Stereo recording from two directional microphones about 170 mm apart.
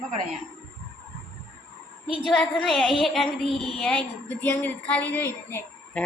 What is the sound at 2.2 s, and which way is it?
Speech, centre (ahead or behind).